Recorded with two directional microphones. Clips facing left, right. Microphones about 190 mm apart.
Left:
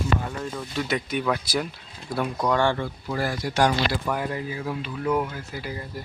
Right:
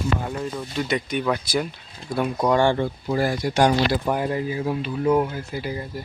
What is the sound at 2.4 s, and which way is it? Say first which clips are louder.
Speech: right 4 dB; 20° right (ahead or behind).